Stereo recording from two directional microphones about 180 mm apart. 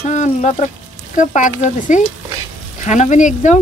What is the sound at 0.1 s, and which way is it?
Speech, 40° left (ahead or behind).